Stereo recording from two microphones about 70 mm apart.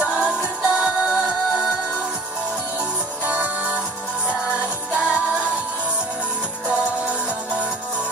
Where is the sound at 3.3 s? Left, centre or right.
Centre.